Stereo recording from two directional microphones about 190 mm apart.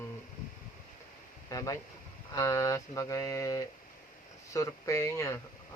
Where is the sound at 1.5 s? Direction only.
20° left (ahead or behind).